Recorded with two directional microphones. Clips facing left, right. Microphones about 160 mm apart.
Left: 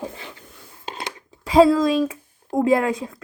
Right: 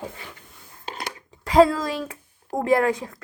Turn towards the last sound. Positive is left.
turn(degrees=20)  # may be behind; listen again after turning